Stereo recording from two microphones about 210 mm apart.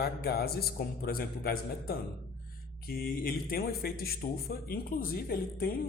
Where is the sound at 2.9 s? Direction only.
45° left (ahead or behind).